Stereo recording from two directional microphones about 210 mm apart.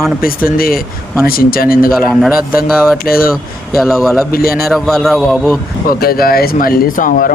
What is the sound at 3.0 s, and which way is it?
Speech, 45° left (ahead or behind).